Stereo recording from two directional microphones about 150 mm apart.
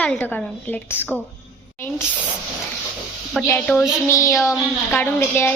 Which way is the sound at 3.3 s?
10° left (ahead or behind).